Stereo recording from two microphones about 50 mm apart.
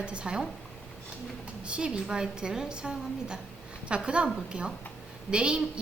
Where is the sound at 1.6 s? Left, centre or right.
Centre.